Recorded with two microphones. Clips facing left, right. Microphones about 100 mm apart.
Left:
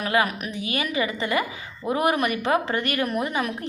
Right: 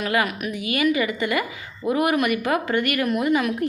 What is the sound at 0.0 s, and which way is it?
A woman's voice, 25° left (ahead or behind).